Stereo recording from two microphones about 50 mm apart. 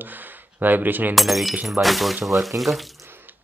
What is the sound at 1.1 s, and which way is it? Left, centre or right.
Speech, centre.